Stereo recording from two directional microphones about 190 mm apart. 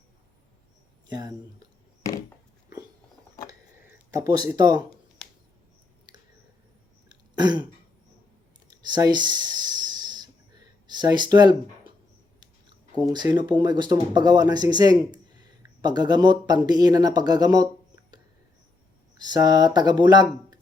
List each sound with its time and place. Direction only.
1.1 s speech: 20° right (ahead or behind)
4.1 s speech: 20° right (ahead or behind)
7.1 s throat clearing: 20° right (ahead or behind)
8.7 s a sound: 20° right (ahead or behind)
10.8 s speech: 20° right (ahead or behind)
19.1 s speech: 20° right (ahead or behind)